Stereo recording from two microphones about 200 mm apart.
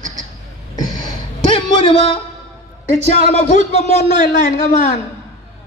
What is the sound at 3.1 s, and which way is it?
A man's voice, 30° left (ahead or behind).